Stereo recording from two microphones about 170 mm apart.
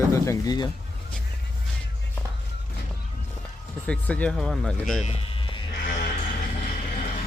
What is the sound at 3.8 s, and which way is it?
Speech, 5° left (ahead or behind).